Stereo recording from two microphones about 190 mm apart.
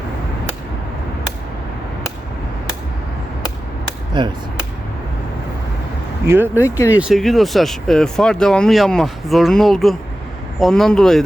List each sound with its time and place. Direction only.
4.1 s speech: 25° right (ahead or behind)
6.2 s speech: 10° right (ahead or behind)
6.6 s speech: 15° left (ahead or behind)
7.0 s speech: centre (ahead or behind)